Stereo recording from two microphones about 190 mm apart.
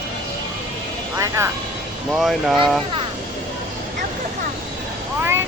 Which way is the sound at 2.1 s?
Centre (ahead or behind).